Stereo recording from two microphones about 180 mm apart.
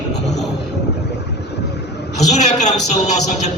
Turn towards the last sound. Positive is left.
turn(degrees=40)  # may be behind; listen again after turning